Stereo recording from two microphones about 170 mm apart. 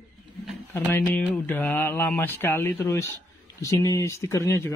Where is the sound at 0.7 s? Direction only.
10° left (ahead or behind).